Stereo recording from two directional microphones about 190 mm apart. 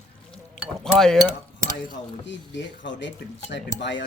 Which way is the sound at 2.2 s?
70° left (ahead or behind).